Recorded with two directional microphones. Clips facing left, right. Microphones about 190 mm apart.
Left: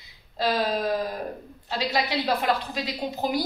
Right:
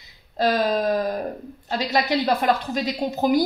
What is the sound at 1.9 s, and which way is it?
A woman's voice, 45° right (ahead or behind).